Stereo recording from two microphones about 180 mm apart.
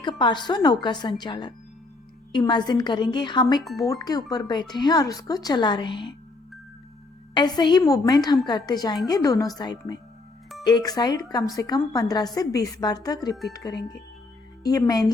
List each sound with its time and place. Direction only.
0.2 s a woman's voice: 25° left (ahead or behind)
7.3 s a woman's voice: 25° left (ahead or behind)